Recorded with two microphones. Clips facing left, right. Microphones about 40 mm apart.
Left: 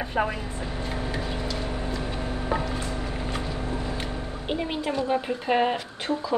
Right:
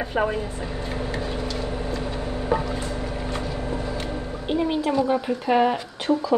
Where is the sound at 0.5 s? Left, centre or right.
Right.